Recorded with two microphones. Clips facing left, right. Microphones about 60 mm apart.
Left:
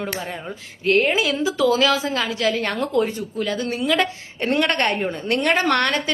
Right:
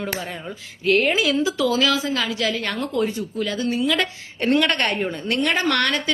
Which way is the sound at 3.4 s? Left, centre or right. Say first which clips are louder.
Right 1 dB; left.